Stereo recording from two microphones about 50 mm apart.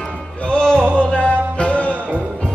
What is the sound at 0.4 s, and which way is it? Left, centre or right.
Music, centre.